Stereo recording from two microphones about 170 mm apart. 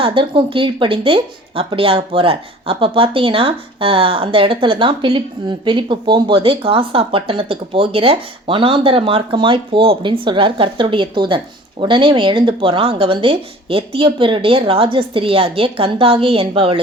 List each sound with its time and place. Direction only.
0.0 s a woman's voice: 30° right (ahead or behind)